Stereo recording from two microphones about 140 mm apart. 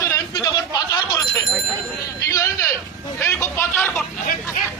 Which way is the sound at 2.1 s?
25° left (ahead or behind).